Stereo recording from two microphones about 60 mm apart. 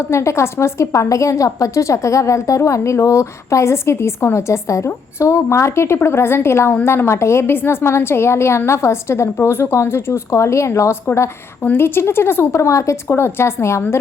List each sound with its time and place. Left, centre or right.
0.1 s a woman's voice: left
11.6 s a woman's voice: left
13.1 s a woman's voice: left